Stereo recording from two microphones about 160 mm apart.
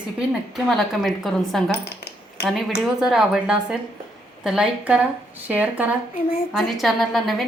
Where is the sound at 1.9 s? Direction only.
90° left.